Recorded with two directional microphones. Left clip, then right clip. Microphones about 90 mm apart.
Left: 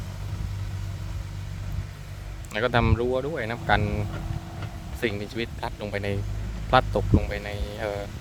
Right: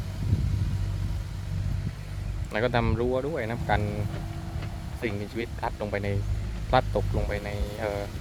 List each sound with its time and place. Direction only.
2.5 s speech: 30° left (ahead or behind)